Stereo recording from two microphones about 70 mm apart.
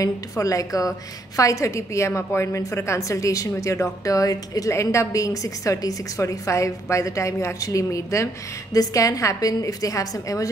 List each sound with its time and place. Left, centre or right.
0.0 s a woman's voice: left